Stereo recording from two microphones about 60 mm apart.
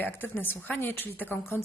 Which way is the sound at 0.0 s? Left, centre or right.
Left.